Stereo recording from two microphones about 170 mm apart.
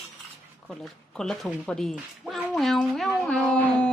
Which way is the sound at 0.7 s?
Centre (ahead or behind).